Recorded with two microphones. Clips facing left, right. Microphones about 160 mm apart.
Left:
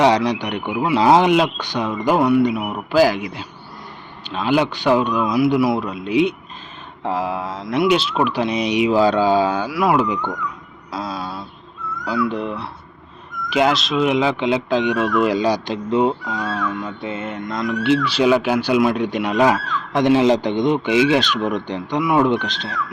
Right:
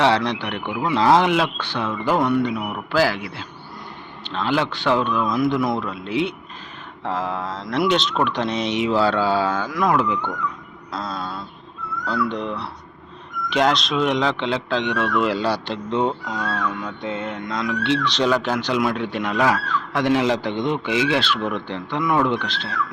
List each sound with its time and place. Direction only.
0.0 s speech: 15° left (ahead or behind)
10.9 s a sound: 5° left (ahead or behind)
12.0 s speech: 5° left (ahead or behind); by 22.7 s 20° left (ahead or behind)